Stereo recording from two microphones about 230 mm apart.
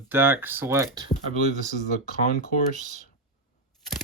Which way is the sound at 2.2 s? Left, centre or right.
Left.